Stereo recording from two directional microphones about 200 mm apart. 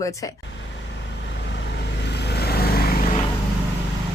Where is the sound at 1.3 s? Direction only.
60° left (ahead or behind).